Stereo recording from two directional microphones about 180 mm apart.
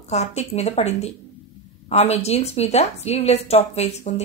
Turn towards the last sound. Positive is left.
turn(degrees=35)  # may be behind; listen again after turning